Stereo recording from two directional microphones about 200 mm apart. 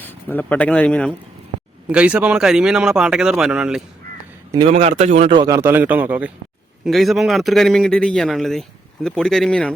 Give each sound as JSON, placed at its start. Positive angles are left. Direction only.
{"t": 0.0, "sound": "speech", "side_deg": 10}
{"t": 1.9, "sound": "speech", "side_deg": -5}
{"t": 4.5, "sound": "a man's voice", "side_deg": -30}